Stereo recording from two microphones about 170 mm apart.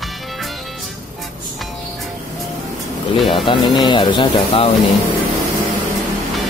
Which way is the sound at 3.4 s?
25° left (ahead or behind).